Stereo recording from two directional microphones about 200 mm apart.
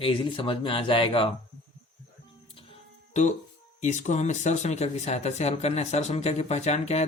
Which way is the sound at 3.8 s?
35° left (ahead or behind).